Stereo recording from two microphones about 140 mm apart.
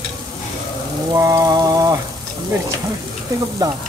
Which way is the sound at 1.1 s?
25° right (ahead or behind).